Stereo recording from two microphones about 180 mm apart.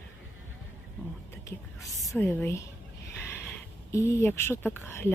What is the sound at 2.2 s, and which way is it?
Speech, 10° left (ahead or behind).